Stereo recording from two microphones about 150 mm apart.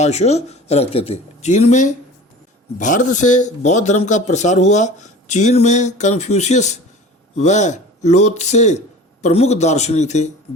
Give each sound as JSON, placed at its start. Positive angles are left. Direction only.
{"t": 0.0, "sound": "a man's voice", "side_deg": 45}